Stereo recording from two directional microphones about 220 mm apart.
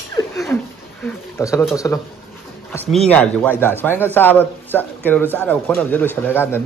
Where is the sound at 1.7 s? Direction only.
15° left (ahead or behind).